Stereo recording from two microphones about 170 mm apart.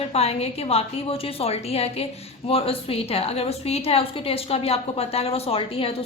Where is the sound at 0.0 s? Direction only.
35° left (ahead or behind).